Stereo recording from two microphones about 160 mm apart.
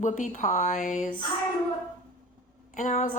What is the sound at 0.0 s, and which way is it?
A woman's voice, 50° left (ahead or behind).